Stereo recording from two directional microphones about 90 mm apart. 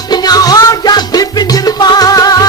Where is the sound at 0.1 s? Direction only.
50° left (ahead or behind).